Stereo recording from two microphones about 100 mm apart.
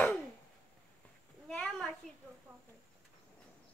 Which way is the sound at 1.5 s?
10° left (ahead or behind).